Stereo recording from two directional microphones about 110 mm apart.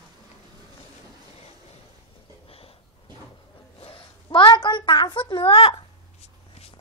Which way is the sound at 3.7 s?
55° left (ahead or behind).